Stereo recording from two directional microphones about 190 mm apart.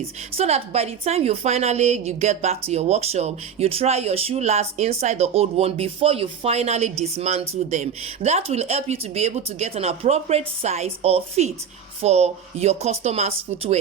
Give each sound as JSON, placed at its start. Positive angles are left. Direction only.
{"t": 0.0, "sound": "a woman's voice", "side_deg": -35}